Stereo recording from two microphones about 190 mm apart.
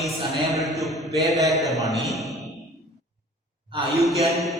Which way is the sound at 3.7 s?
25° right (ahead or behind).